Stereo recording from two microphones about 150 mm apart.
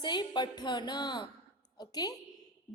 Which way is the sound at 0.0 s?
30° left (ahead or behind).